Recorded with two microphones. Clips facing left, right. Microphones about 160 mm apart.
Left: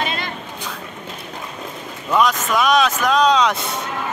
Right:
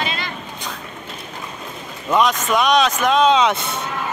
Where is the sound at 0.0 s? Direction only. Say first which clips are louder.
Left 1 dB; 50° left (ahead or behind).